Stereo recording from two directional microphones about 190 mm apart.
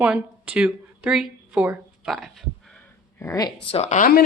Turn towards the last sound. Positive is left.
turn(degrees=45)  # may be behind; listen again after turning